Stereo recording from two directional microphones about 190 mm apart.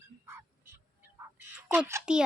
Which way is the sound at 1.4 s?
10° right (ahead or behind).